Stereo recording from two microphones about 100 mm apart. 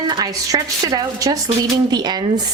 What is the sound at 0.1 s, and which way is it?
A woman's voice, 45° right (ahead or behind).